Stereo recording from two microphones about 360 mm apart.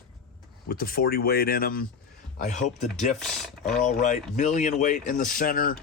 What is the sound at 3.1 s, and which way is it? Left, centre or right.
Speech, centre.